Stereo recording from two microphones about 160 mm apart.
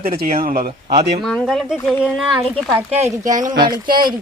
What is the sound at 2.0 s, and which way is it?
Speech, centre (ahead or behind).